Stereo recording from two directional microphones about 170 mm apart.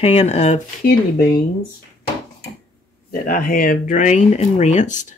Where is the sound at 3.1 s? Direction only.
60° left (ahead or behind).